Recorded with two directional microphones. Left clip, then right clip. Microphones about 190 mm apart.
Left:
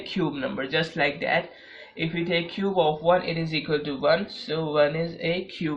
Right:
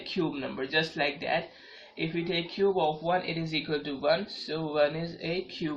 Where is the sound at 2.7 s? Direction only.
40° left (ahead or behind).